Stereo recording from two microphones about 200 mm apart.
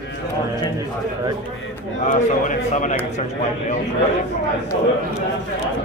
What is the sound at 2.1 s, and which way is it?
Speech, 40° left (ahead or behind).